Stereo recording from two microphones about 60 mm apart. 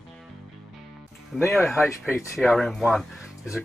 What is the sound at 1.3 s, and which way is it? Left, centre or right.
Speech, centre.